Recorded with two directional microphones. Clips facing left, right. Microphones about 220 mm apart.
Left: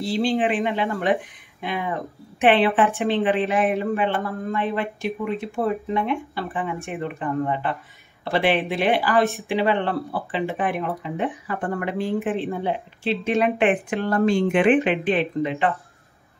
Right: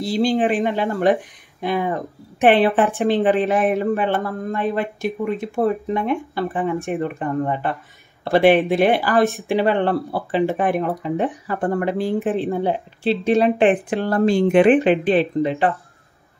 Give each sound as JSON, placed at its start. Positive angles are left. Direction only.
{"t": 0.0, "sound": "speech", "side_deg": -40}